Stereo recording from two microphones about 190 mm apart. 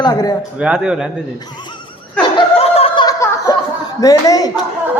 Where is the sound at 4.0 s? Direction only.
20° left (ahead or behind).